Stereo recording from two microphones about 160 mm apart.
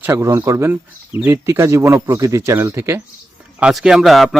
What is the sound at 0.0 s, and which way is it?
Speech, 15° right (ahead or behind).